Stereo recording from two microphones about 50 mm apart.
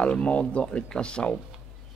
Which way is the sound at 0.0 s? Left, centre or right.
Left.